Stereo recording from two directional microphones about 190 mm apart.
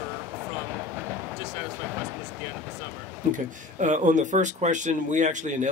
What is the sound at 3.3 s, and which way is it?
Speech, 40° right (ahead or behind).